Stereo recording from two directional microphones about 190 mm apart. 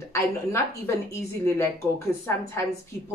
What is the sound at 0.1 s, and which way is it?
Speech, 15° left (ahead or behind).